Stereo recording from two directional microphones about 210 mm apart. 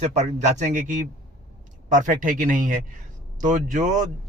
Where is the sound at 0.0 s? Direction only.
30° right (ahead or behind).